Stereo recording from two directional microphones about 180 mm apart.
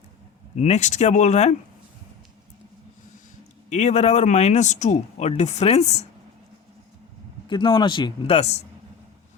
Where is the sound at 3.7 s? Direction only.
40° left (ahead or behind).